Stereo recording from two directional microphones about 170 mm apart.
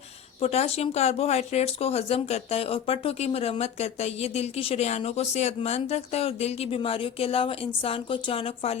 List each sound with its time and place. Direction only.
0.4 s speech: 40° left (ahead or behind)